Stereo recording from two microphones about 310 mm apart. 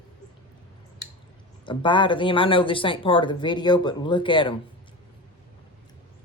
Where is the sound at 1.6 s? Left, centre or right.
Centre.